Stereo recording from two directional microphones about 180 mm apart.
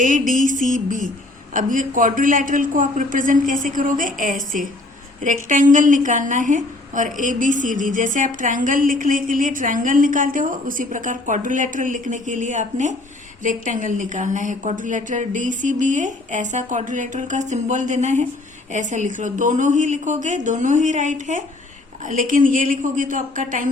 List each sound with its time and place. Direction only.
0.0 s a woman's voice: 45° right (ahead or behind)